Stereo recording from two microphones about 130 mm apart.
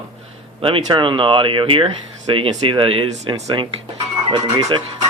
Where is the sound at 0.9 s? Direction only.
40° right (ahead or behind).